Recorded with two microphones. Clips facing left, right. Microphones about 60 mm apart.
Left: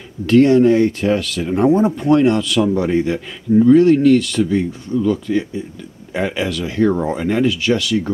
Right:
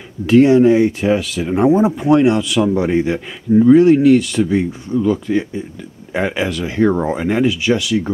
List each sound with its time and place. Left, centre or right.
0.3 s speech: centre